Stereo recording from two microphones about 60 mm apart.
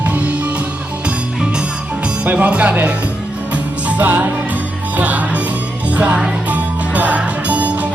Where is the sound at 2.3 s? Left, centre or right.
Right.